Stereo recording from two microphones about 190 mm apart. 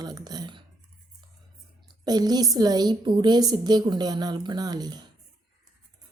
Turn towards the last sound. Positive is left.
turn(degrees=-20)  # may be behind; listen again after turning